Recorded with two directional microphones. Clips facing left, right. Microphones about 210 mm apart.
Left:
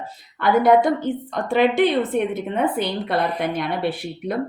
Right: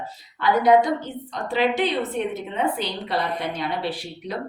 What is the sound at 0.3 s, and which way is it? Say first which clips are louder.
A woman's voice: left 2 dB; 55° left (ahead or behind).